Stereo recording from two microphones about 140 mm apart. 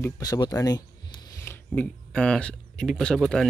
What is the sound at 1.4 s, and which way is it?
Speech, 15° left (ahead or behind).